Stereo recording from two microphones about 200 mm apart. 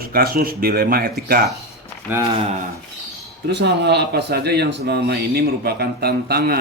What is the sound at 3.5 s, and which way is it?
Speech, 55° right (ahead or behind).